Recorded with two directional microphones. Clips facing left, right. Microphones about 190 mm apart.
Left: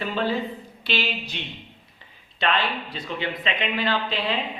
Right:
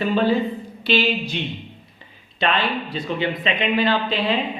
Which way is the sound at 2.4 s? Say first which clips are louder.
Right 3 dB; 15° right (ahead or behind).